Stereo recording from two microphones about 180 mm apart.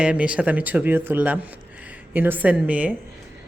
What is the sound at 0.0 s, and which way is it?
A woman's voice, 5° right (ahead or behind).